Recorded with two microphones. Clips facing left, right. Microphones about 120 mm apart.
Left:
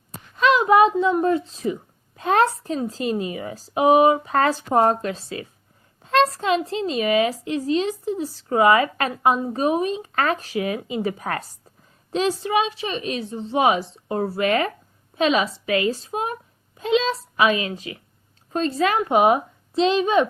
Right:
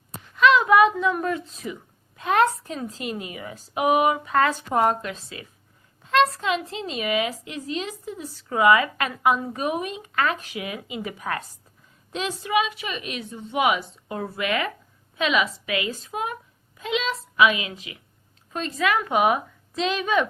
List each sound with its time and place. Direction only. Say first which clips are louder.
0.3 s a woman's voice: left 1 dB; 30° left (ahead or behind)